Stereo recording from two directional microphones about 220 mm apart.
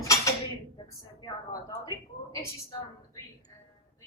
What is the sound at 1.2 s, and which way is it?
A woman's voice, 15° left (ahead or behind).